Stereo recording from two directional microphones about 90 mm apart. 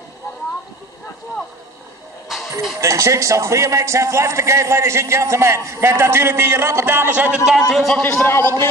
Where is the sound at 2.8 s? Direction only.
35° right (ahead or behind); by 7.5 s 15° right (ahead or behind).